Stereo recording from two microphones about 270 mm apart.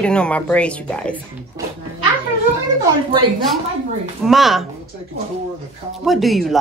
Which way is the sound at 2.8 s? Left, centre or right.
Centre.